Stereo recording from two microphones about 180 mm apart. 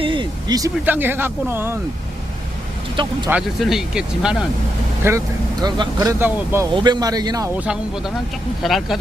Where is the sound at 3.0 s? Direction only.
25° right (ahead or behind).